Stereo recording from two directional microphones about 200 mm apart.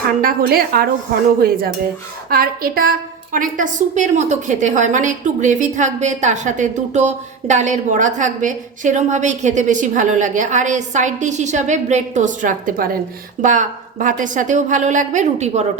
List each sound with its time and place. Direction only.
0.2 s a woman's voice: 45° right (ahead or behind)